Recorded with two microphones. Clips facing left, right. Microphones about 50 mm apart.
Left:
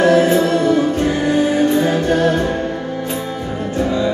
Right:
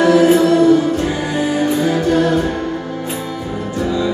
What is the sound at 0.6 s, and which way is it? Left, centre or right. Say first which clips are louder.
Music: right 3 dB; left.